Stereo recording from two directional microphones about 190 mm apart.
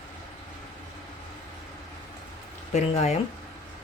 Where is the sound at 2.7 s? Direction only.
35° left (ahead or behind).